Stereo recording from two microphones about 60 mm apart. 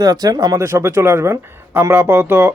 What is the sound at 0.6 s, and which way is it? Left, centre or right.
Speech, right.